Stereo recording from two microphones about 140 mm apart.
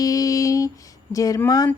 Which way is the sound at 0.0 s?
25° left (ahead or behind).